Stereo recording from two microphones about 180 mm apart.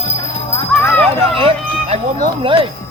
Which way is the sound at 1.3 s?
30° right (ahead or behind).